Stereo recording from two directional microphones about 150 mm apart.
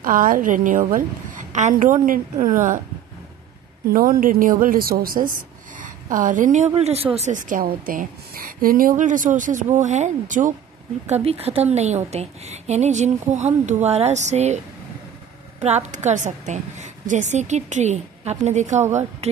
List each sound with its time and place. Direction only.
0.0 s a woman's voice: 65° right (ahead or behind)
3.9 s a woman's voice: 70° right (ahead or behind); by 7.1 s 45° right (ahead or behind)
7.2 s a woman's voice: 55° right (ahead or behind)
11.2 s a woman's voice: 40° right (ahead or behind)
15.6 s a woman's voice: 50° right (ahead or behind)